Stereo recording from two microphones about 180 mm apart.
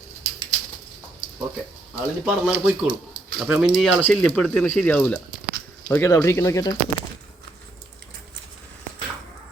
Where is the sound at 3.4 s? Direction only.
5° right (ahead or behind); by 6.9 s 20° left (ahead or behind).